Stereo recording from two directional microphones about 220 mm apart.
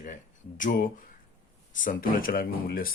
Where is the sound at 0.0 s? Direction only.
35° left (ahead or behind).